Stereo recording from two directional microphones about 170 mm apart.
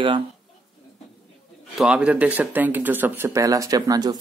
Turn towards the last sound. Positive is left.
turn(degrees=-20)  # may be behind; listen again after turning